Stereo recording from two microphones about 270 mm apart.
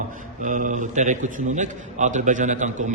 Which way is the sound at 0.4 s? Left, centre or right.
Right.